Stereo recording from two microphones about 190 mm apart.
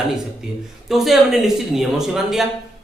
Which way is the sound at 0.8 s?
Centre (ahead or behind).